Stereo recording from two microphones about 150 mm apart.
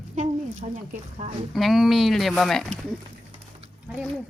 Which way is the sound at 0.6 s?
50° right (ahead or behind).